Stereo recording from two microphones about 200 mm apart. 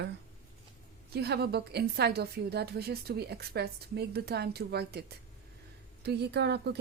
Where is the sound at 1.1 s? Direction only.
55° right (ahead or behind).